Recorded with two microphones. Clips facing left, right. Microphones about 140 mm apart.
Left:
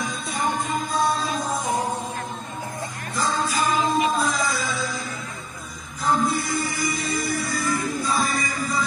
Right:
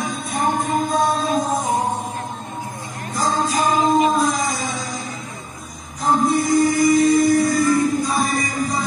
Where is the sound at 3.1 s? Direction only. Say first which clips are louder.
Right 4 dB; 45° right (ahead or behind).